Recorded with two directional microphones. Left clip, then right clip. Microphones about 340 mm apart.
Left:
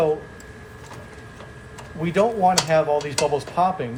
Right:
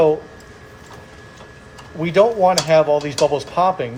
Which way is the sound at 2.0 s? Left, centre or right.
Right.